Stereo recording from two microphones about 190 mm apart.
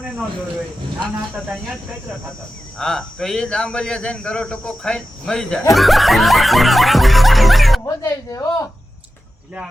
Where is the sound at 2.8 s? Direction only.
Centre (ahead or behind).